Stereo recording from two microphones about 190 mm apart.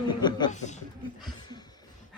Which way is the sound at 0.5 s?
40° left (ahead or behind).